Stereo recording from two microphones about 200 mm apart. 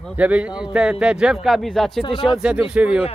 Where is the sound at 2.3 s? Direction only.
5° right (ahead or behind).